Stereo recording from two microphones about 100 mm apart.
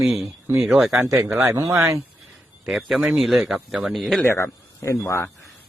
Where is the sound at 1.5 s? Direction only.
30° right (ahead or behind).